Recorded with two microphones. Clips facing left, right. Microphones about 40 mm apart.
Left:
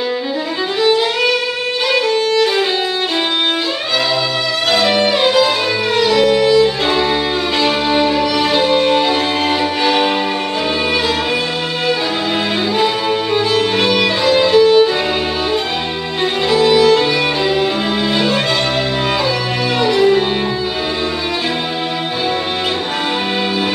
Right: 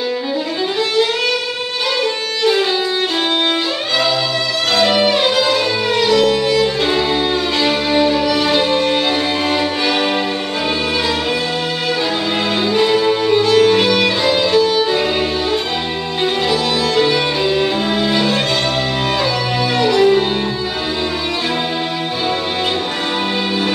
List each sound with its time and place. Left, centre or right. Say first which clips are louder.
4.7 s violin: right 1 dB; centre
5.9 s music: left 2 dB; centre
12.7 s music: right 3 dB; centre
16.4 s music: left 6 dB; centre
19.8 s music: even; centre